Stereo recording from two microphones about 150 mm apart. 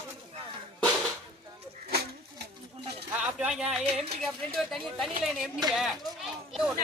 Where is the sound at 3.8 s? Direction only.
45° right (ahead or behind).